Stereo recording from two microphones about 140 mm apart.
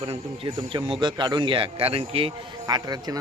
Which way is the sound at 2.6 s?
25° right (ahead or behind).